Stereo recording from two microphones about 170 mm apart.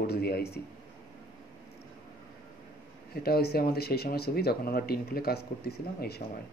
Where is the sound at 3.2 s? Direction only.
65° left (ahead or behind).